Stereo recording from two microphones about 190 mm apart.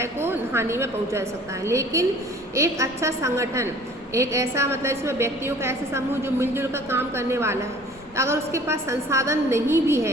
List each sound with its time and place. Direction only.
0.0 s a woman's voice: 10° right (ahead or behind)